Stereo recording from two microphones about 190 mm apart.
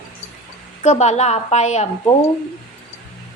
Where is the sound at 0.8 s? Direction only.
35° left (ahead or behind).